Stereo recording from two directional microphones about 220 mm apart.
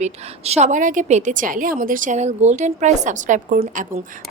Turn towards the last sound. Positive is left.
turn(degrees=-35)  # may be behind; listen again after turning